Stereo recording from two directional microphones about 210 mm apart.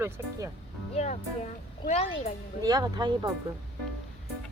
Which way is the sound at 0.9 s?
35° left (ahead or behind).